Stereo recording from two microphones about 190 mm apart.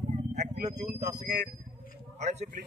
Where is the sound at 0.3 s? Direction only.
35° right (ahead or behind).